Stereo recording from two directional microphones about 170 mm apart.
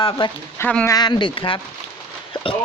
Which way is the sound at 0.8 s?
25° left (ahead or behind).